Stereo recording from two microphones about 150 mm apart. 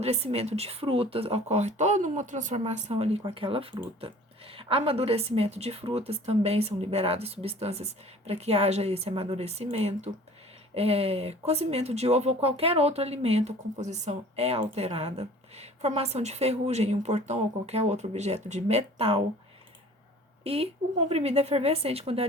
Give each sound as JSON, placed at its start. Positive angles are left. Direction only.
{"t": 0.0, "sound": "speech", "side_deg": -45}
{"t": 20.4, "sound": "a woman's voice", "side_deg": -40}